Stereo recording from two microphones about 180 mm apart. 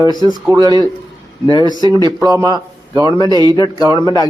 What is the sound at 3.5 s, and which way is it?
Speech, 20° left (ahead or behind).